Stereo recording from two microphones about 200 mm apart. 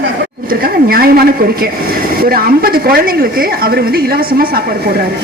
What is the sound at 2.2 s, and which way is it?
A woman's voice, 50° right (ahead or behind).